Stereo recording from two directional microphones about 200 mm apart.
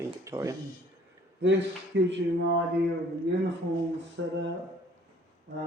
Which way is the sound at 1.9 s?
60° right (ahead or behind).